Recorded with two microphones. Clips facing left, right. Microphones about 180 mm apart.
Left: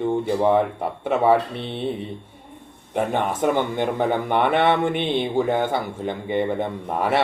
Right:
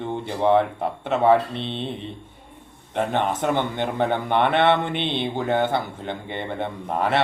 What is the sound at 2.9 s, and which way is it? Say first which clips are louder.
Speech: left 1 dB; 10° left (ahead or behind).